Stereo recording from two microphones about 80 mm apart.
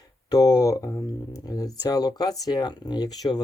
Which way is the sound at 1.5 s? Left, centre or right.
Left.